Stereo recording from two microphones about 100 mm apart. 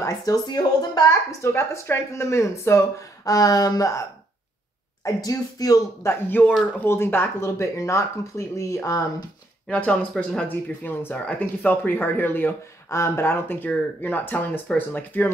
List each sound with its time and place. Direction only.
0.0 s speech: 35° left (ahead or behind)
1.5 s speech: 25° left (ahead or behind)
5.0 s speech: 40° left (ahead or behind)
6.0 s speech: 20° left (ahead or behind)
9.7 s speech: 10° left (ahead or behind)